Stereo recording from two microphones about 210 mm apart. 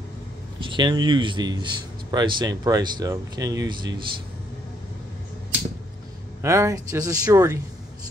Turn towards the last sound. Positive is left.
turn(degrees=-15)  # may be behind; listen again after turning